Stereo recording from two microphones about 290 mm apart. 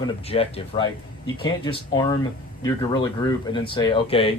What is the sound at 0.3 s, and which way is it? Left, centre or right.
Speech, centre.